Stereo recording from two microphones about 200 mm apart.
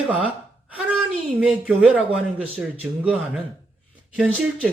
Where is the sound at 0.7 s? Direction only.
5° right (ahead or behind).